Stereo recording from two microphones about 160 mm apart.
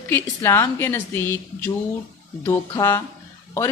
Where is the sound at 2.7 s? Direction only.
15° left (ahead or behind).